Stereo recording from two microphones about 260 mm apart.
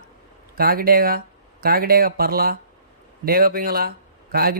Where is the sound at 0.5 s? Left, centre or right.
Right.